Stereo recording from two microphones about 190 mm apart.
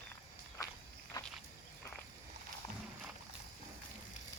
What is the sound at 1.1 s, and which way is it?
Walk, 20° left (ahead or behind).